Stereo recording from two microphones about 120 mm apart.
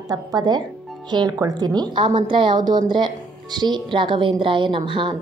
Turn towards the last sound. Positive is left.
turn(degrees=-45)  # may be behind; listen again after turning